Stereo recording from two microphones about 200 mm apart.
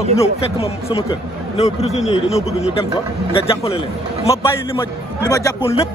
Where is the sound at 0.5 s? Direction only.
30° left (ahead or behind).